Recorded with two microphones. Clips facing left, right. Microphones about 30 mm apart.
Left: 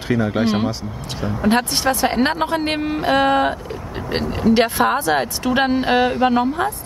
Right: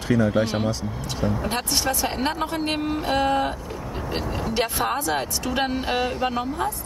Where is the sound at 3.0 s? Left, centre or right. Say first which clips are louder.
Left 7 dB; left.